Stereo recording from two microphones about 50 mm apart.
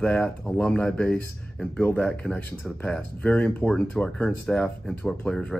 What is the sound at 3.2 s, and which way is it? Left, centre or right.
Speech, left.